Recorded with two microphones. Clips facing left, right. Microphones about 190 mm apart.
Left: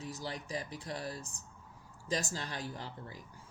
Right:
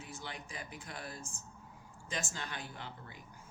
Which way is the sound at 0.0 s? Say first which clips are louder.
Left 5 dB; 40° left (ahead or behind).